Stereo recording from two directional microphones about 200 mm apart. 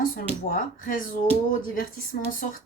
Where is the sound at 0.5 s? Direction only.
40° left (ahead or behind).